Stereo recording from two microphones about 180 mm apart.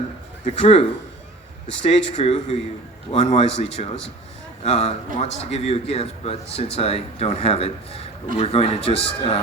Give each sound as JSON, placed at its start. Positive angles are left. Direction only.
{"t": 0.4, "sound": "a man's voice", "side_deg": 35}